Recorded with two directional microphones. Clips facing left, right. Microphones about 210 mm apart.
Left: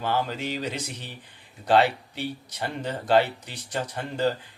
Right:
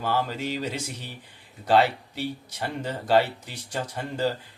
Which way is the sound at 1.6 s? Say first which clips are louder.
Even; centre (ahead or behind).